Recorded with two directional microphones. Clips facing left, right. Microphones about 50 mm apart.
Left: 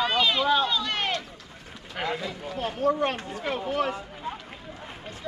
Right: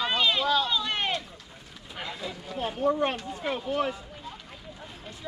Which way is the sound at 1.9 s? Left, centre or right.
Left.